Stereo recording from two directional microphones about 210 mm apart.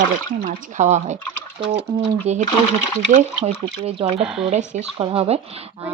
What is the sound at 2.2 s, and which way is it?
Speech, 30° right (ahead or behind).